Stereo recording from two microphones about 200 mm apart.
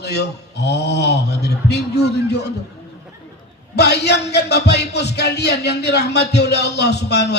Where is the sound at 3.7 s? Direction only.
55° left (ahead or behind).